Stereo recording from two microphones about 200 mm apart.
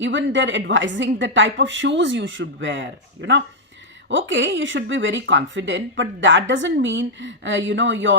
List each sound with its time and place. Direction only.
0.0 s speech: 65° right (ahead or behind)